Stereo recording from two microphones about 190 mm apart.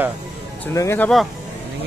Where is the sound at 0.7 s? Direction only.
10° left (ahead or behind).